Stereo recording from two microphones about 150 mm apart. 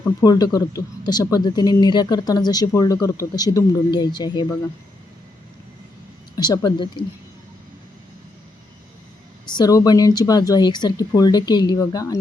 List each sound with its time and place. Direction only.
0.2 s speech: 25° left (ahead or behind)
6.3 s speech: 25° left (ahead or behind)
9.5 s speech: 25° left (ahead or behind)